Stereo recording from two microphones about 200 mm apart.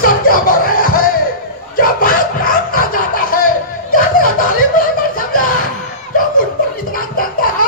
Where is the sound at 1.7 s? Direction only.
45° left (ahead or behind).